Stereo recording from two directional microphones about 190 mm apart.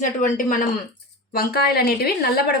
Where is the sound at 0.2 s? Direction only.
45° left (ahead or behind).